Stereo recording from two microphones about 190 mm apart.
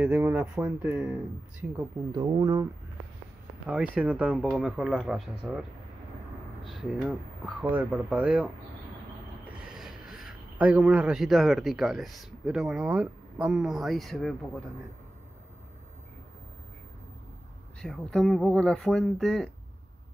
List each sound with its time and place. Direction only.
0.0 s speech: 10° right (ahead or behind)
2.1 s speech: 20° right (ahead or behind)
3.6 s speech: 5° right (ahead or behind)
6.7 s speech: centre (ahead or behind)
9.7 s a man's voice: centre (ahead or behind)
17.7 s speech: 5° left (ahead or behind)